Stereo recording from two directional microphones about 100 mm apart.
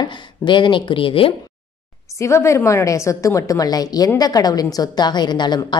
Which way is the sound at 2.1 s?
30° left (ahead or behind).